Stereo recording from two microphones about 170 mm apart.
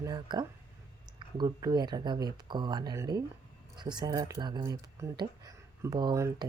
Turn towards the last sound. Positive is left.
turn(degrees=-20)  # may be behind; listen again after turning